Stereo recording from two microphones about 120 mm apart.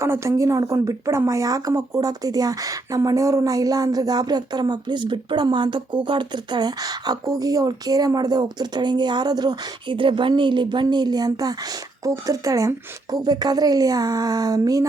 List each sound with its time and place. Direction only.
0.0 s speech: 25° right (ahead or behind)